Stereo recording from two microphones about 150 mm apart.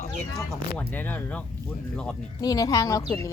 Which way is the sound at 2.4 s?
25° left (ahead or behind).